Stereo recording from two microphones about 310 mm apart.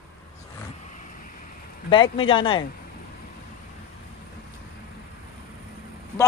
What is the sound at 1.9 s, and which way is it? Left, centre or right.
Speech, centre.